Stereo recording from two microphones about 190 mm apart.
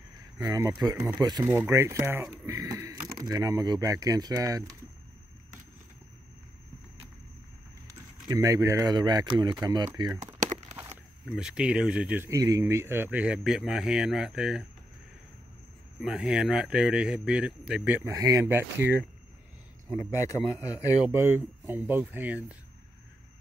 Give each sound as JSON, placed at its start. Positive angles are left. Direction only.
{"t": 0.4, "sound": "speech", "side_deg": -20}
{"t": 8.3, "sound": "speech", "side_deg": -15}
{"t": 10.1, "sound": "crumpling", "side_deg": -40}
{"t": 11.2, "sound": "speech", "side_deg": -5}
{"t": 16.0, "sound": "speech", "side_deg": -5}
{"t": 20.0, "sound": "a man's voice", "side_deg": 15}
{"t": 21.0, "sound": "speech", "side_deg": -10}